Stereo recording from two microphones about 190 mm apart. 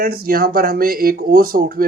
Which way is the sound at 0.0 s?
50° right (ahead or behind).